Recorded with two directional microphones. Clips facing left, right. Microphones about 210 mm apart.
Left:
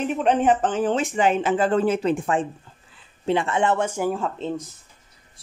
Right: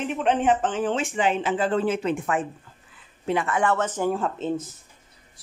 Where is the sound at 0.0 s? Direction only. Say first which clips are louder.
Left 3 dB; 40° left (ahead or behind).